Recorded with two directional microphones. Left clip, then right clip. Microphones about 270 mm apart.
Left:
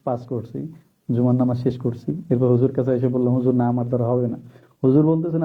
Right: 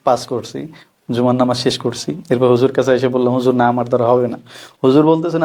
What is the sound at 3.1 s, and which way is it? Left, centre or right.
A man's voice, right.